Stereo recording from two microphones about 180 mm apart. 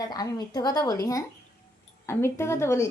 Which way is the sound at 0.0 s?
20° left (ahead or behind).